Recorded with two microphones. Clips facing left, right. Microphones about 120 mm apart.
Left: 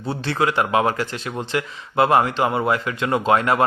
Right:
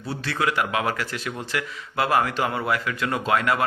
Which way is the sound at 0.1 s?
30° left (ahead or behind).